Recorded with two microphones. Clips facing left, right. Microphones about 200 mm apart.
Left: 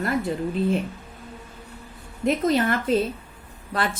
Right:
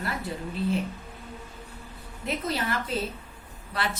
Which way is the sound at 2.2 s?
45° left (ahead or behind).